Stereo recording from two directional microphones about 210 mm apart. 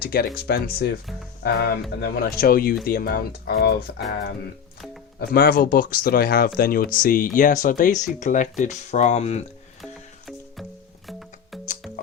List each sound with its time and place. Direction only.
0.0 s speech: 45° left (ahead or behind)
5.3 s speech: 45° left (ahead or behind); by 9.4 s 30° left (ahead or behind)
9.8 s music: centre (ahead or behind)